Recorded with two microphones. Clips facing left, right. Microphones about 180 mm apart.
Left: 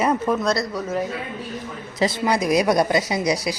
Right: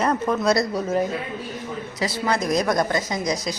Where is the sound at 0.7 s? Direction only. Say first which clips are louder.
Right 2 dB; 25° right (ahead or behind).